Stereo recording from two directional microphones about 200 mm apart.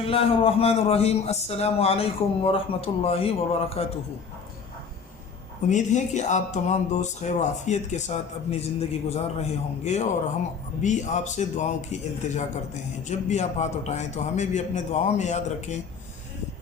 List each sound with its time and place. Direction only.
0.0 s a man's voice: 30° left (ahead or behind)
5.6 s speech: 35° left (ahead or behind)